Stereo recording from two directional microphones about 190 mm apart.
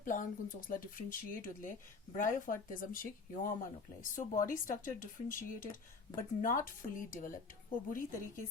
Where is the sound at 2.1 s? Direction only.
45° left (ahead or behind).